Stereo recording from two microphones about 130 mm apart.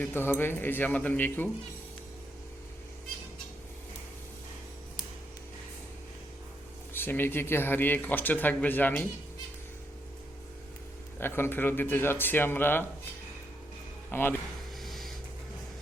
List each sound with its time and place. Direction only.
0.0 s speech: 15° left (ahead or behind)
6.9 s speech: 15° left (ahead or behind)
11.2 s speech: 15° left (ahead or behind)
14.1 s speech: 15° left (ahead or behind)
14.8 s a sound: centre (ahead or behind)